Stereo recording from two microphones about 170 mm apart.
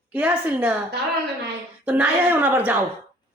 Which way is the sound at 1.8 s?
10° right (ahead or behind).